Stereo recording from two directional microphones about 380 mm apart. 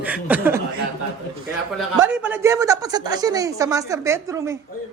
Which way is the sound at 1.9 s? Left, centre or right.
Right.